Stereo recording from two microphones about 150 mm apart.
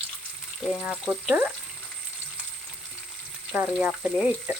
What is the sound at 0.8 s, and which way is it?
Speech, 10° right (ahead or behind).